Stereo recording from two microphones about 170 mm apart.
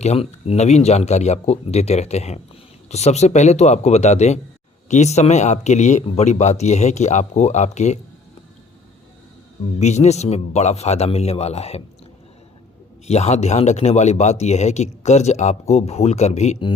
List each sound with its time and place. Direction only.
0.0 s speech: 40° left (ahead or behind)
9.7 s speech: 40° left (ahead or behind)
13.1 s speech: 40° left (ahead or behind)